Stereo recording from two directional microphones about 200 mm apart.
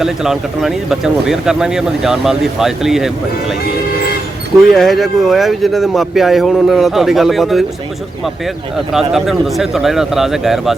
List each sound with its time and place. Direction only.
0.0 s speech: centre (ahead or behind)
4.7 s speech: centre (ahead or behind)
8.7 s speech: centre (ahead or behind)